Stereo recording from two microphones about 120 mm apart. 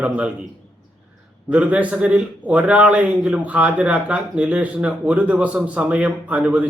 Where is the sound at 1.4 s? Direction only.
10° right (ahead or behind).